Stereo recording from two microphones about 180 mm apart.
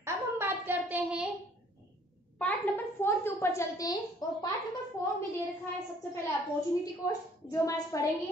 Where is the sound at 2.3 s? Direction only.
10° left (ahead or behind).